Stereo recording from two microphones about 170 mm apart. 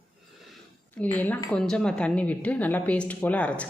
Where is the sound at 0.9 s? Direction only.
10° left (ahead or behind).